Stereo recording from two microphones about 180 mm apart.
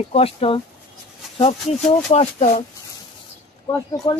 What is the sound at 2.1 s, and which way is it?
Speech, 35° left (ahead or behind).